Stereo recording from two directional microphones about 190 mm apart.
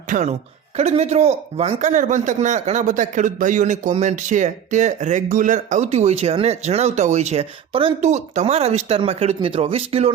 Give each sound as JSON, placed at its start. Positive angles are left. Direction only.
{"t": 0.1, "sound": "speech", "side_deg": -40}